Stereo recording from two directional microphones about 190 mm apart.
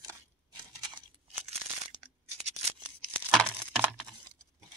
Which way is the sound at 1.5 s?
35° right (ahead or behind).